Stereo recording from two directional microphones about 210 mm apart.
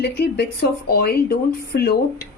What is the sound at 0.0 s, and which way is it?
Speech, 50° left (ahead or behind).